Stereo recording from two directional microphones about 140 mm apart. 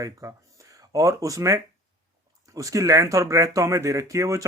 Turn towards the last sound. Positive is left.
turn(degrees=-20)  # may be behind; listen again after turning